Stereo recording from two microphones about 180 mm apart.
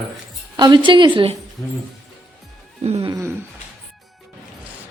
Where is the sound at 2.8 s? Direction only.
35° right (ahead or behind).